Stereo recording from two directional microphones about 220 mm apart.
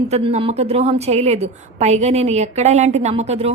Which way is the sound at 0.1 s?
30° right (ahead or behind).